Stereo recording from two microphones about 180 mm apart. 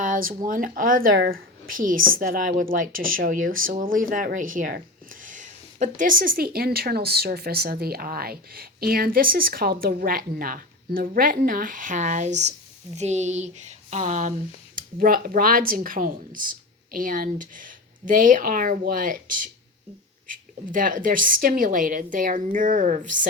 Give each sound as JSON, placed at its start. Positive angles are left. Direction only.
{"t": 0.0, "sound": "speech", "side_deg": -50}
{"t": 20.7, "sound": "speech", "side_deg": -50}